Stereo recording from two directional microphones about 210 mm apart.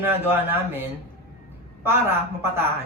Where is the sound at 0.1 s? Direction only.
10° right (ahead or behind).